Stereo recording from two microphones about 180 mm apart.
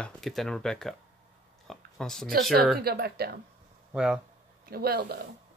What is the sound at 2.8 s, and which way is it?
Speech, 60° right (ahead or behind).